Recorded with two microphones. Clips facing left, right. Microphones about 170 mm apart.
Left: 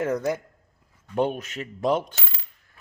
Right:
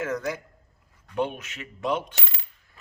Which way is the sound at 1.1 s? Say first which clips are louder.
Left 4 dB; 40° left (ahead or behind).